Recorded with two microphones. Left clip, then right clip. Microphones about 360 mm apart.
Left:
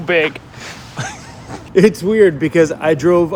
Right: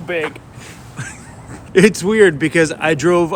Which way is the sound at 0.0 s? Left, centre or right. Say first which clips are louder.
Left 6 dB; left.